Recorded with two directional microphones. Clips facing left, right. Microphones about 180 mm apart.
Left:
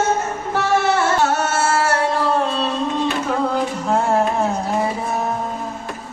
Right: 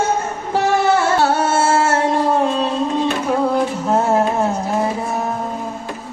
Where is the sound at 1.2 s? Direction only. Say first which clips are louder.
Right 3 dB; 30° right (ahead or behind); by 2.7 s 15° right (ahead or behind).